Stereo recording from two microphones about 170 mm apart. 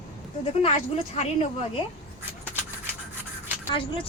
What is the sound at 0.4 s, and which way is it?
Speech, 40° left (ahead or behind).